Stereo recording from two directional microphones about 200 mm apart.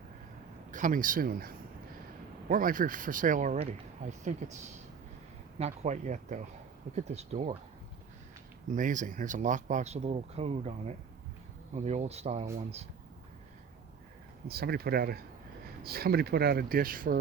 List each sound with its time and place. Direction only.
0.7 s speech: 40° right (ahead or behind)
8.7 s speech: 40° right (ahead or behind)
14.4 s speech: 50° right (ahead or behind)